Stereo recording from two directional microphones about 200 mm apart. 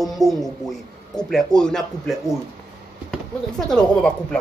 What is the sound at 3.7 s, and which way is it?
Speech, 5° left (ahead or behind).